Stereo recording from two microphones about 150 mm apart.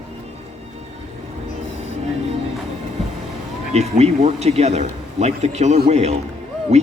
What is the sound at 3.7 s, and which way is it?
A man's voice, 45° right (ahead or behind).